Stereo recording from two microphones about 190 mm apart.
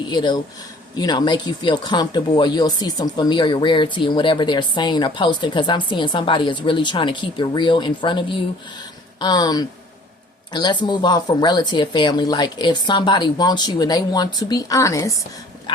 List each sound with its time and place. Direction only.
0.1 s speech: 25° left (ahead or behind)